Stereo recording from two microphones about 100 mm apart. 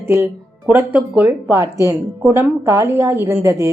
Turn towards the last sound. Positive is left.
turn(degrees=-25)  # may be behind; listen again after turning